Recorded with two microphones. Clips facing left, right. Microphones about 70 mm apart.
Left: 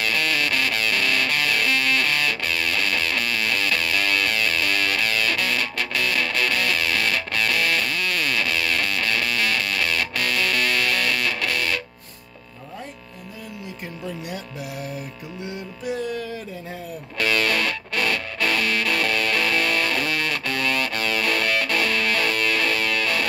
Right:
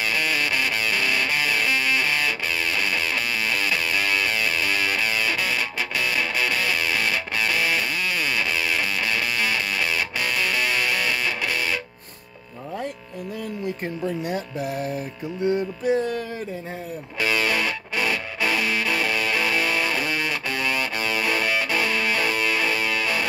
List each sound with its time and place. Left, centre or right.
0.0 s music: centre
14.0 s music: right
17.2 s music: centre